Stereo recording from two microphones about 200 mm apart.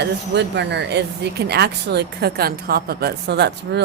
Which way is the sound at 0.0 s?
60° right (ahead or behind).